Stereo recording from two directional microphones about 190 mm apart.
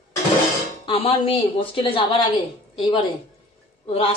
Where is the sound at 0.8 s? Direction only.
30° left (ahead or behind).